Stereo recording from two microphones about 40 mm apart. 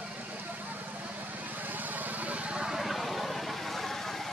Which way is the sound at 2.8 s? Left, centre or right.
Centre.